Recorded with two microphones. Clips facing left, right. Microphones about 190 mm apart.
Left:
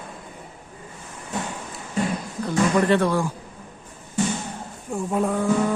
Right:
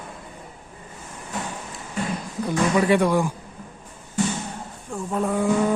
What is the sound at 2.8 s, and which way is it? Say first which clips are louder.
Speech: right 2 dB; 10° right (ahead or behind).